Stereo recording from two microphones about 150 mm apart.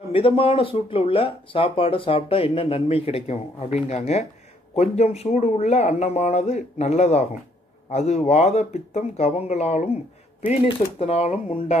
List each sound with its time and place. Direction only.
0.1 s speech: 40° left (ahead or behind)
11.0 s speech: 45° left (ahead or behind)